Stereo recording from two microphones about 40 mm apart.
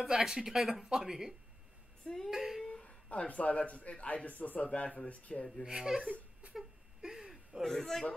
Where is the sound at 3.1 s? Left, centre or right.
Left.